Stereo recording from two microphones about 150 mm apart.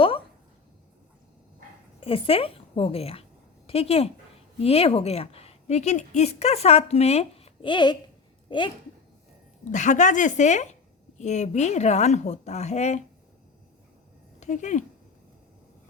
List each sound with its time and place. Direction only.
2.0 s a woman's voice: 40° left (ahead or behind)
9.6 s a woman's voice: 55° left (ahead or behind)
14.3 s speech: 50° left (ahead or behind)